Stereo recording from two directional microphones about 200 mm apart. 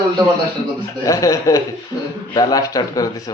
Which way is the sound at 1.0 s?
15° left (ahead or behind).